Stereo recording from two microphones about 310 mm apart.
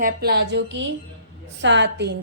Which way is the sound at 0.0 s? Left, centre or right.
Right.